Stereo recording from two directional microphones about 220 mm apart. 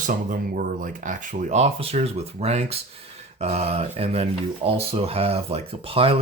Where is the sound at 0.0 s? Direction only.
35° right (ahead or behind).